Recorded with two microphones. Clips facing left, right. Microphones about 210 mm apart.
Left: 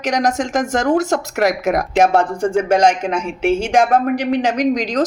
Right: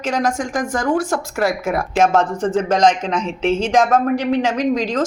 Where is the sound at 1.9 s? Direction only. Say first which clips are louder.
Even; 15° left (ahead or behind).